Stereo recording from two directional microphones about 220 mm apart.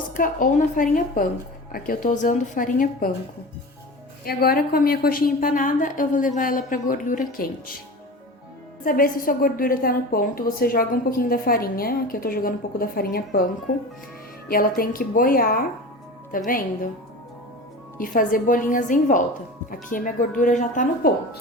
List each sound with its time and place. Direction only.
0.2 s a woman's voice: 35° left (ahead or behind)
4.3 s a woman's voice: 45° left (ahead or behind)
8.8 s a woman's voice: 40° left (ahead or behind)
17.9 s a woman's voice: 40° left (ahead or behind)